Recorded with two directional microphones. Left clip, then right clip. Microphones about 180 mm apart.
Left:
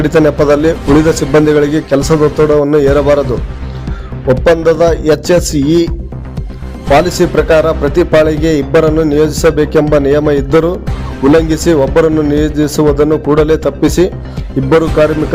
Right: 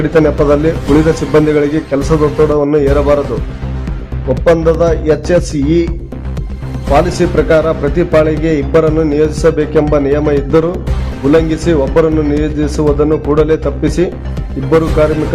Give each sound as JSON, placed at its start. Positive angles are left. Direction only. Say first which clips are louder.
{"t": 0.0, "sound": "a man's voice", "louder": "left 1 dB", "side_deg": 35}
{"t": 4.4, "sound": "a man's voice", "louder": "left 1 dB", "side_deg": 30}
{"t": 6.9, "sound": "a man's voice", "louder": "left 2 dB", "side_deg": 30}